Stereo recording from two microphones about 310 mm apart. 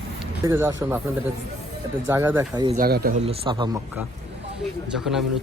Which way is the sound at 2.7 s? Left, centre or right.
Right.